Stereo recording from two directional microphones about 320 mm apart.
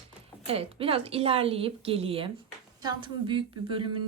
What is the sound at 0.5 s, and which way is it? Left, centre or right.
A woman's voice, centre.